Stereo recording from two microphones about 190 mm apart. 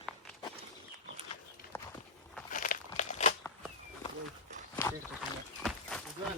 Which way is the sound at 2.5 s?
45° left (ahead or behind).